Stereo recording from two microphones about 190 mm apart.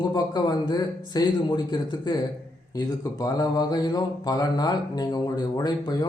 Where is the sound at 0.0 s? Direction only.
20° left (ahead or behind).